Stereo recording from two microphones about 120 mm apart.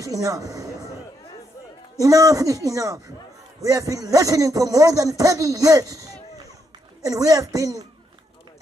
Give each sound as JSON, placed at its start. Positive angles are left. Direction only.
{"t": 0.0, "sound": "speech", "side_deg": -30}
{"t": 2.0, "sound": "a man's voice", "side_deg": -30}